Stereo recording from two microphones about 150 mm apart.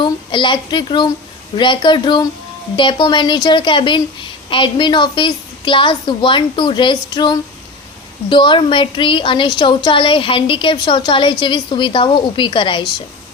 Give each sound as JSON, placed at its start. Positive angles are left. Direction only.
{"t": 0.0, "sound": "a woman's voice", "side_deg": 30}